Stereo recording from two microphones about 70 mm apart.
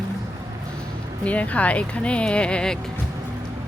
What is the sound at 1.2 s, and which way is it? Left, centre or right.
Speech, centre.